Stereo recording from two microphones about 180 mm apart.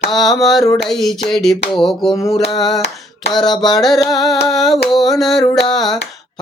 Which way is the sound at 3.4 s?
25° left (ahead or behind).